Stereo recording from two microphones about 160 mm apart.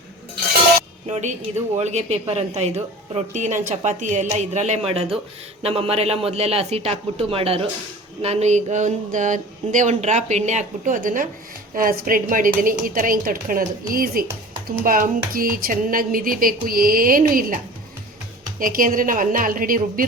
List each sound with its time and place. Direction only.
1.0 s speech: 45° right (ahead or behind)
18.6 s speech: 60° right (ahead or behind)